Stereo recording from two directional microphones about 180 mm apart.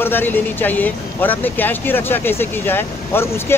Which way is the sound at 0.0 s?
10° left (ahead or behind).